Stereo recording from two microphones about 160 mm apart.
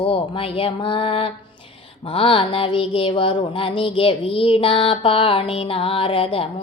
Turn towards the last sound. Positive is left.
turn(degrees=35)  # may be behind; listen again after turning